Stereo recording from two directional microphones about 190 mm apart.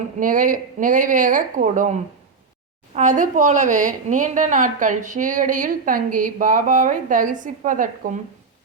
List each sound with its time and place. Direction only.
0.2 s speech: 45° right (ahead or behind)